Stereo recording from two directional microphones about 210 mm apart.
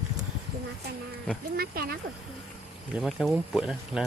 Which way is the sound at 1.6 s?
45° right (ahead or behind).